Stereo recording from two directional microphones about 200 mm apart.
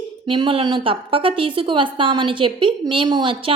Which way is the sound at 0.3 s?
25° right (ahead or behind).